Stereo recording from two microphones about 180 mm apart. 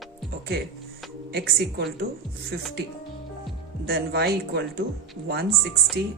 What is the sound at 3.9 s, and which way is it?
Speech, 60° right (ahead or behind).